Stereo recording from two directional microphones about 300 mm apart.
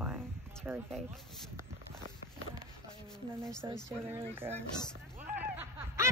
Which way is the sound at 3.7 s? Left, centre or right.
Centre.